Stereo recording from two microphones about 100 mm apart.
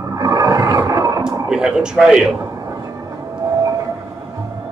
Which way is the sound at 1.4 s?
10° right (ahead or behind).